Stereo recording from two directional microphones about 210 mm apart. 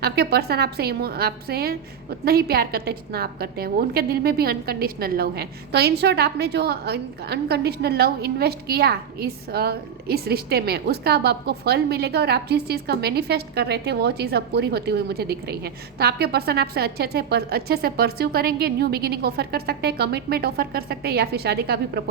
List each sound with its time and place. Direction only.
0.0 s a woman's voice: 50° right (ahead or behind)